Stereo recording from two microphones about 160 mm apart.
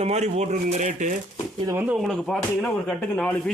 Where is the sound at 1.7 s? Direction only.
15° right (ahead or behind).